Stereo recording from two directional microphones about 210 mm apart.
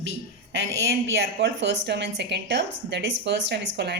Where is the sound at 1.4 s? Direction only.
55° right (ahead or behind).